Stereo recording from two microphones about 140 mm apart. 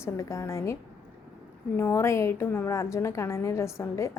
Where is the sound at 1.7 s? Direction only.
20° left (ahead or behind).